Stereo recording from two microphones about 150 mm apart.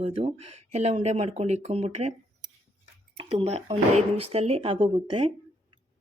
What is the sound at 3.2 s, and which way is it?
Speech, 40° right (ahead or behind).